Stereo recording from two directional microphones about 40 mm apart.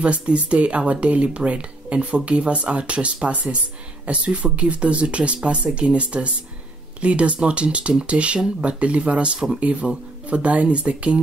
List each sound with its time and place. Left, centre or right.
0.0 s speech: right